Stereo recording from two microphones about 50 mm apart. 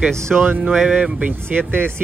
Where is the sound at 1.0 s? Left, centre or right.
Right.